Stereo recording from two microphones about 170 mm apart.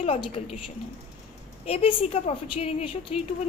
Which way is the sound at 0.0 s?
35° left (ahead or behind).